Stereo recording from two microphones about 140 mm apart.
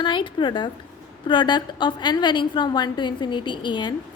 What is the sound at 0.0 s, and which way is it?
A woman's voice, 35° left (ahead or behind).